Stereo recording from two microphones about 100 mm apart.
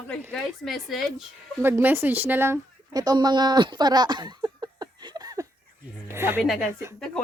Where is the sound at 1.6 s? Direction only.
20° right (ahead or behind).